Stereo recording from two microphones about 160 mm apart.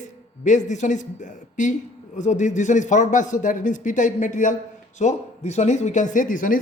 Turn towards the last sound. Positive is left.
turn(degrees=55)  # may be behind; listen again after turning